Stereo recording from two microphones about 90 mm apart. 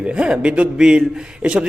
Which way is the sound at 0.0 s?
10° right (ahead or behind).